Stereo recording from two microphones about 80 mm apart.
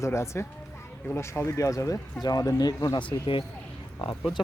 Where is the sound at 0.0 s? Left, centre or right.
Left.